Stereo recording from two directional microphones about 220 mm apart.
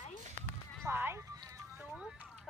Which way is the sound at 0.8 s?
10° right (ahead or behind).